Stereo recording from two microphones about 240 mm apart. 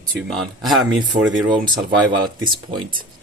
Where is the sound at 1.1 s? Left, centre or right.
Right.